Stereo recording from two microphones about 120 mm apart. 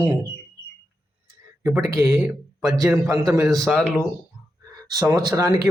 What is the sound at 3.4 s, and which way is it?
Speech, 5° left (ahead or behind).